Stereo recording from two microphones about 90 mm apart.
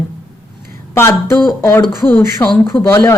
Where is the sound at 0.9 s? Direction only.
30° left (ahead or behind).